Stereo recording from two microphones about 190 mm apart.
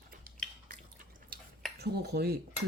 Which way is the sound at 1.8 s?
60° right (ahead or behind).